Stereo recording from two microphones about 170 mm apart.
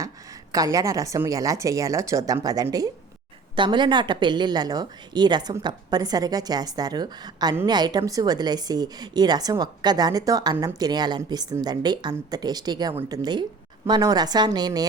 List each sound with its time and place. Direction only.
0.5 s a woman's voice: 20° right (ahead or behind)